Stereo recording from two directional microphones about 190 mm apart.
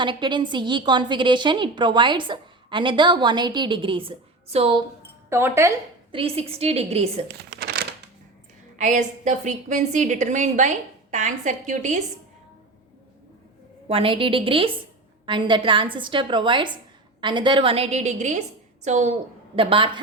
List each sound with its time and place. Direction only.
0.0 s a woman's voice: 25° right (ahead or behind)
5.3 s speech: 15° right (ahead or behind)
6.1 s a woman's voice: 30° right (ahead or behind)
7.3 s crumpling: 55° right (ahead or behind)
8.8 s a woman's voice: 40° right (ahead or behind)
13.8 s a woman's voice: 30° right (ahead or behind)
19.5 s a woman's voice: 25° right (ahead or behind)